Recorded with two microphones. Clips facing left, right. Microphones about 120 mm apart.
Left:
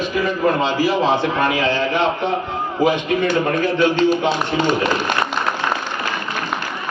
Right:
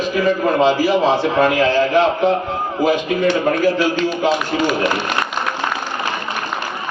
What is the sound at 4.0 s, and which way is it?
Speech, 30° left (ahead or behind).